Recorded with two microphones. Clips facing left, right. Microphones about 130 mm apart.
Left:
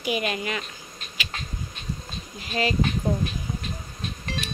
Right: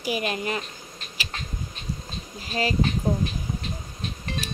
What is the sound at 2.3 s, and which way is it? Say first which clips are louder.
Speech: left 1 dB; 35° right (ahead or behind).